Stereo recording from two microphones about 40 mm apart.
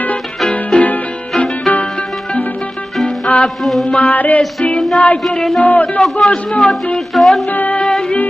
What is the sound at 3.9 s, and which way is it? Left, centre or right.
Music, left.